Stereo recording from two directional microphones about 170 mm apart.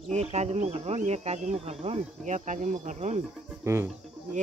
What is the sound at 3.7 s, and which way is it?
Music, 15° right (ahead or behind).